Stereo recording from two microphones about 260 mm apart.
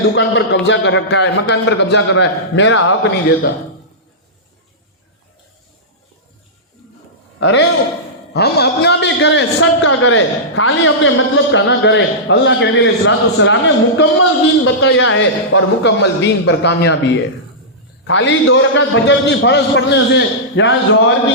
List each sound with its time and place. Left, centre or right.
0.2 s a man's voice: left
7.3 s a man's voice: left
18.0 s a man's voice: left